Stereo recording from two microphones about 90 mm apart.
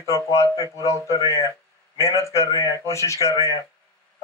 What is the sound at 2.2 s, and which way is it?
A man's voice, 35° left (ahead or behind).